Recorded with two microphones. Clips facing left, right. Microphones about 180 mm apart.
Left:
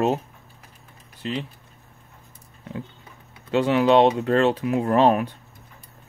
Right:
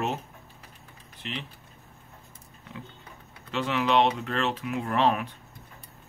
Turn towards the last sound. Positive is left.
turn(degrees=40)  # may be behind; listen again after turning